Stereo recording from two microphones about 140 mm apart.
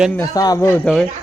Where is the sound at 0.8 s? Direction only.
5° left (ahead or behind).